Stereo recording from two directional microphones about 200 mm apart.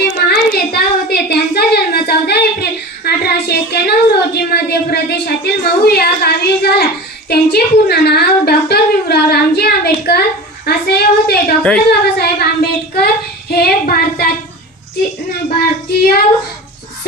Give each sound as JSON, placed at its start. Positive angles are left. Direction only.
{"t": 0.0, "sound": "a sound", "side_deg": 50}
{"t": 11.9, "sound": "speech", "side_deg": 55}
{"t": 15.5, "sound": "speech", "side_deg": 50}